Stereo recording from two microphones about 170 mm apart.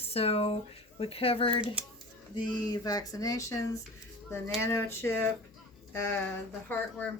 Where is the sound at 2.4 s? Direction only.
25° left (ahead or behind).